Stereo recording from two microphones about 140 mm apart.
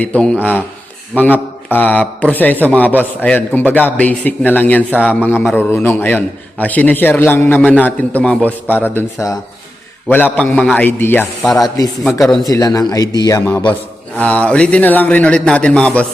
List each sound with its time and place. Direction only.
0.0 s a man's voice: 10° left (ahead or behind)
10.1 s a man's voice: 15° left (ahead or behind)
11.4 s speech: centre (ahead or behind)
12.5 s a man's voice: 25° left (ahead or behind)
14.2 s a man's voice: 10° left (ahead or behind)